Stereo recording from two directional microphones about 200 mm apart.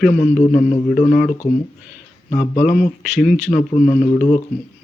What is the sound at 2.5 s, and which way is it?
Speech, 40° left (ahead or behind).